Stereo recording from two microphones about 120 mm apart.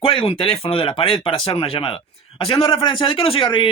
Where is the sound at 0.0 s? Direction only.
45° left (ahead or behind).